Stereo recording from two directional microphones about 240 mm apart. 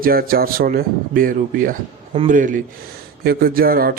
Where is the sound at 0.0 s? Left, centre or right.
Right.